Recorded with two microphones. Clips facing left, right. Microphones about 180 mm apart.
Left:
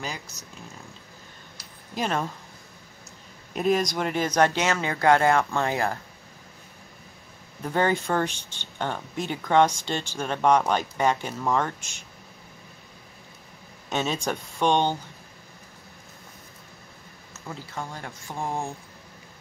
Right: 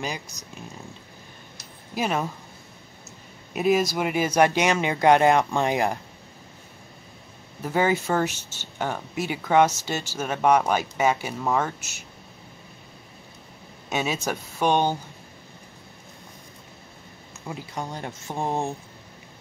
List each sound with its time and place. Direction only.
0.0 s speech: 15° right (ahead or behind)
2.0 s speech: 10° right (ahead or behind)
3.5 s speech: 5° right (ahead or behind)
7.6 s speech: 5° right (ahead or behind)
13.8 s speech: 10° right (ahead or behind)
17.5 s speech: 20° right (ahead or behind)